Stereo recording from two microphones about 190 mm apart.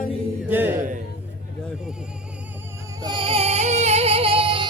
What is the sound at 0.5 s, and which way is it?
Speech, 10° right (ahead or behind).